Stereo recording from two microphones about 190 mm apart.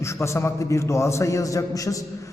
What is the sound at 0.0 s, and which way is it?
A man's voice, 15° left (ahead or behind).